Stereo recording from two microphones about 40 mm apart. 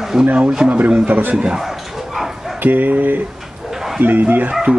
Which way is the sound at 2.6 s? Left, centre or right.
Right.